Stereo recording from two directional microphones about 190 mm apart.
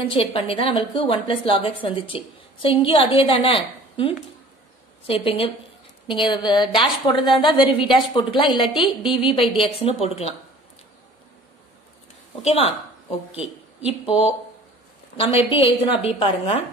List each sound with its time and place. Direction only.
0.1 s a woman's voice: 30° left (ahead or behind)
12.4 s a woman's voice: 35° left (ahead or behind)
14.0 s a woman's voice: 30° left (ahead or behind)